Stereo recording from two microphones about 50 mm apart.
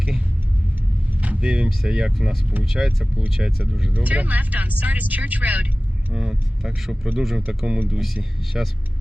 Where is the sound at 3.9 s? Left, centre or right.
Right.